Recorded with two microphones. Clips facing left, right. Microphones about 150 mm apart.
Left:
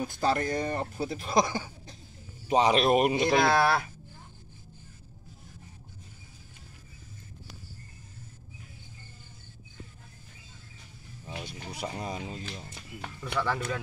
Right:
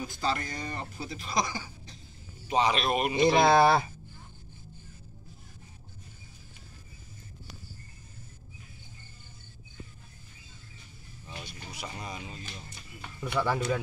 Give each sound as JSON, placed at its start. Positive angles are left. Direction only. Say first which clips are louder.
{"t": 0.0, "sound": "speech", "louder": "left 4 dB", "side_deg": 55}
{"t": 2.5, "sound": "speech", "louder": "left 4 dB", "side_deg": 40}
{"t": 3.3, "sound": "speech", "louder": "right 4 dB", "side_deg": -25}
{"t": 11.3, "sound": "a sound", "louder": "left 4 dB", "side_deg": 55}
{"t": 11.8, "sound": "speech", "louder": "left 5 dB", "side_deg": 30}
{"t": 13.2, "sound": "speech", "louder": "right 2 dB", "side_deg": -10}